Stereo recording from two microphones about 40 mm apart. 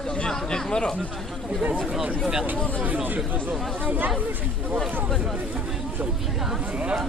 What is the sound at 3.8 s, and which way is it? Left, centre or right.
Speech, right.